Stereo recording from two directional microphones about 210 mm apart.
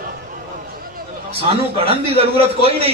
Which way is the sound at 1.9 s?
30° right (ahead or behind).